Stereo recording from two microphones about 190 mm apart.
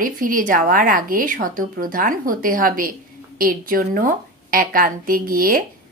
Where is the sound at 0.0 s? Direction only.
45° right (ahead or behind).